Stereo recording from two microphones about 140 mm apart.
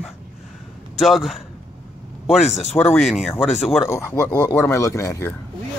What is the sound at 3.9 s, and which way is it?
Speech, 15° left (ahead or behind).